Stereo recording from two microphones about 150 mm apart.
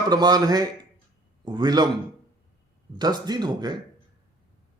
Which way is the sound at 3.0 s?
25° right (ahead or behind).